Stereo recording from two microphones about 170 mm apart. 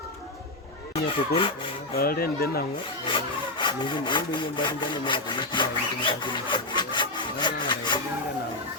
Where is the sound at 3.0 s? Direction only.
30° left (ahead or behind).